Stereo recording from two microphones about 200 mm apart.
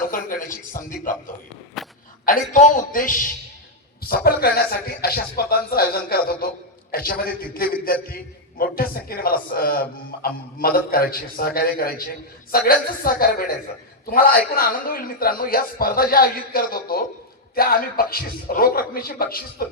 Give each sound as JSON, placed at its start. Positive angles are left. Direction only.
{"t": 0.0, "sound": "a man's voice", "side_deg": 45}
{"t": 1.8, "sound": "a sound", "side_deg": 0}
{"t": 2.2, "sound": "a man's voice", "side_deg": 40}